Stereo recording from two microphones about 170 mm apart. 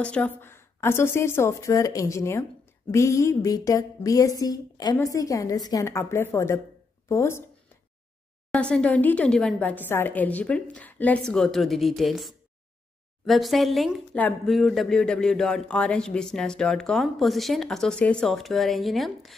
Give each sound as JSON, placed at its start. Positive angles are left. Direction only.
{"t": 0.0, "sound": "a woman's voice", "side_deg": 10}
{"t": 8.5, "sound": "a woman's voice", "side_deg": 5}